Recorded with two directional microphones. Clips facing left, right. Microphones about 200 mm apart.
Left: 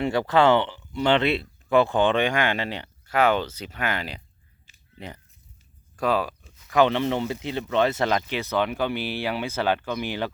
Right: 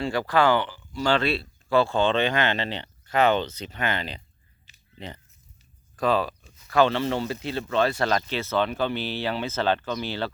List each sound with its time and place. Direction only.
0.0 s speech: 20° left (ahead or behind)